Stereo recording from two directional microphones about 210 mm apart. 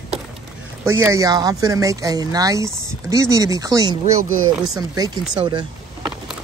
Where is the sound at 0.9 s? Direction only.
10° right (ahead or behind).